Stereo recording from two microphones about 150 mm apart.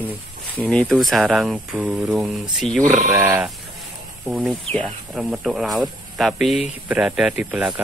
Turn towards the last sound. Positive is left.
turn(degrees=-5)  # may be behind; listen again after turning